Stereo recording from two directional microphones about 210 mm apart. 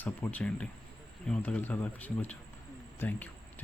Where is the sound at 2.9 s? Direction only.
10° left (ahead or behind).